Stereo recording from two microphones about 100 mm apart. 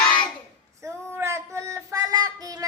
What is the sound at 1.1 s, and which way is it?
Child singing, 25° right (ahead or behind).